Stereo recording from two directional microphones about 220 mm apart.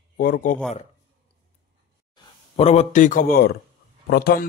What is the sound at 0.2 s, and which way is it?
Speech, 40° left (ahead or behind).